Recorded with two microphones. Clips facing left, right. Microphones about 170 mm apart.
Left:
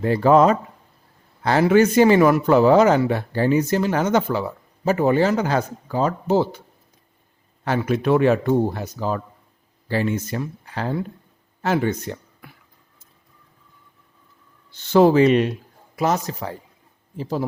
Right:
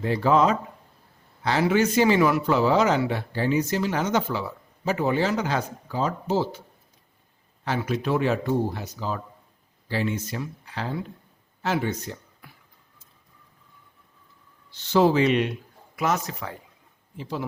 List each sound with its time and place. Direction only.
0.0 s a man's voice: 50° left (ahead or behind)
7.6 s a man's voice: 55° left (ahead or behind)
14.9 s speech: 50° left (ahead or behind)